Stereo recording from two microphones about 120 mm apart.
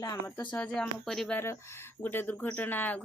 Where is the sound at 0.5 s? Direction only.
10° left (ahead or behind).